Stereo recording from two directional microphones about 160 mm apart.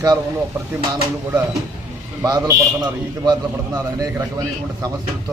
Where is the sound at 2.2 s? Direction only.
20° right (ahead or behind).